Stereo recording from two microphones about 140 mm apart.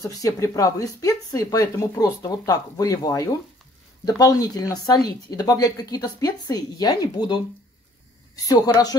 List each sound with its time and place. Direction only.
0.0 s speech: 25° left (ahead or behind)
8.5 s speech: 25° left (ahead or behind)